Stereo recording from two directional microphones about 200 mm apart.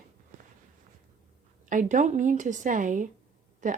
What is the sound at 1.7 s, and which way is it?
Speech, 40° right (ahead or behind).